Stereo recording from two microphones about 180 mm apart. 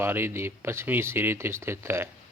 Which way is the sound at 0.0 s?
15° right (ahead or behind).